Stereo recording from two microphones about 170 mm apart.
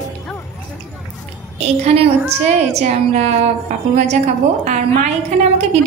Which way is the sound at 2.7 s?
40° right (ahead or behind).